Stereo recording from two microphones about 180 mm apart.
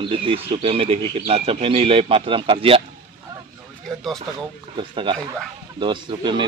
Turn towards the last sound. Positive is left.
turn(degrees=-25)  # may be behind; listen again after turning